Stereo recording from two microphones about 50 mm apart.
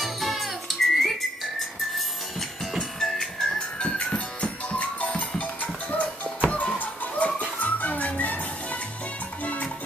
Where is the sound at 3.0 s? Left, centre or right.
Centre; by 9.7 s left.